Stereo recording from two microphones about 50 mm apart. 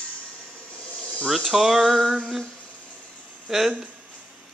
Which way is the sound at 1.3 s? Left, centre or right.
Centre.